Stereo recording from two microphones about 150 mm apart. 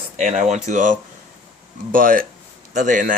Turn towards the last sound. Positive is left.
turn(degrees=-60)  # may be behind; listen again after turning